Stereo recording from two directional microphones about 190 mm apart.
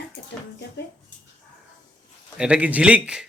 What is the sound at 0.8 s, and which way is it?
Speech, 65° left (ahead or behind).